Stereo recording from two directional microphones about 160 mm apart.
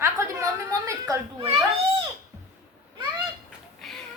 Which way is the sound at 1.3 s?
35° right (ahead or behind).